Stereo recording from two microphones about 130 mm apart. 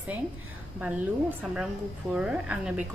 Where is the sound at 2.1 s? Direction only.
5° right (ahead or behind).